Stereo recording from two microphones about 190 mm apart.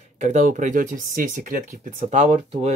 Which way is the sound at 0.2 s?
40° right (ahead or behind).